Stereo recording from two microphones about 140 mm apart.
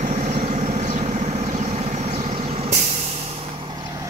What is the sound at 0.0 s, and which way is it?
Vehicle, 55° right (ahead or behind).